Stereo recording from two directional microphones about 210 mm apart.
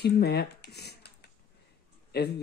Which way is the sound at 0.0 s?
50° left (ahead or behind).